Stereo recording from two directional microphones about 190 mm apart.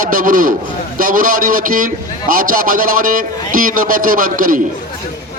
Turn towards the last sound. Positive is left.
turn(degrees=-45)  # may be behind; listen again after turning